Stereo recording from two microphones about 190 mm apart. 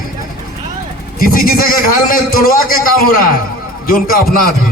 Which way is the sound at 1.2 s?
50° left (ahead or behind).